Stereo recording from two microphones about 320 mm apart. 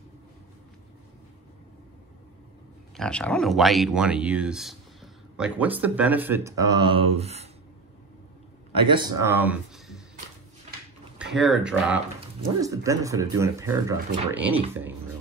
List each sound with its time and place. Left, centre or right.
3.0 s speech: centre
6.8 s speech: right
7.2 s speech: centre
8.8 s speech: centre
11.3 s speech: centre